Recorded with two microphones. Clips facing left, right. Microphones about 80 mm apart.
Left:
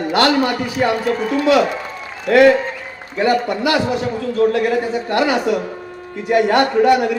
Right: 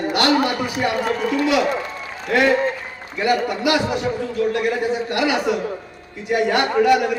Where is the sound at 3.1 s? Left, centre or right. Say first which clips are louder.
Left 3 dB; left.